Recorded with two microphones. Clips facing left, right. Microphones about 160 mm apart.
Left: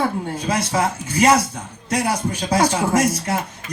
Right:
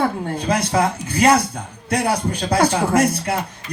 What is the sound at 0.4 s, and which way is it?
Speech, 55° right (ahead or behind).